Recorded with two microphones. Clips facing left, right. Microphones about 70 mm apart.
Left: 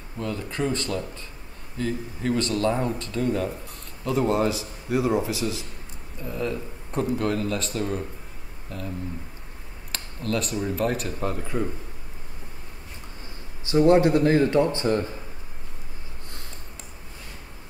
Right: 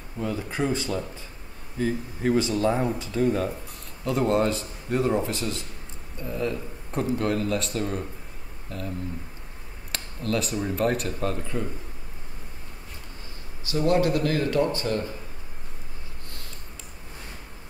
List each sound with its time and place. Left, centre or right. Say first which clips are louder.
0.2 s speech: even; centre
9.9 s speech: even; centre
13.7 s speech: left 5 dB; left